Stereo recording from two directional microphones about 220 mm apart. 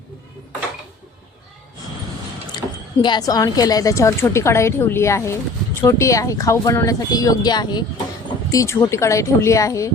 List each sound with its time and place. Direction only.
2.6 s speech: 20° left (ahead or behind)